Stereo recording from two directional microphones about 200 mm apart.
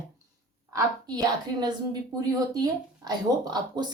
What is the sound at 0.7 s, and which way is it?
Speech, 20° right (ahead or behind).